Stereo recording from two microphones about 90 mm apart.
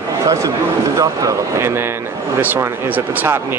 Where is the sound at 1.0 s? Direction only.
40° right (ahead or behind).